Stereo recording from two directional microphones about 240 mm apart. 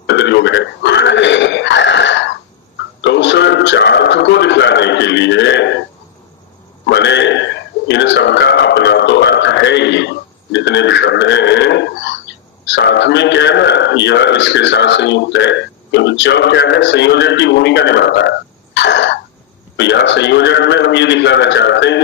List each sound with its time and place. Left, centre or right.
0.0 s burping: left
3.0 s music: left
6.9 s a sound: left